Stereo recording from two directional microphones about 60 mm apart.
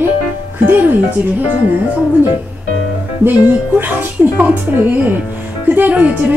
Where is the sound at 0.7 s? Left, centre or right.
Right.